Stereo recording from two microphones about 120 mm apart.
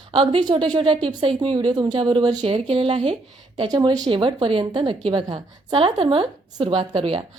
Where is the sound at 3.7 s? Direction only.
35° right (ahead or behind).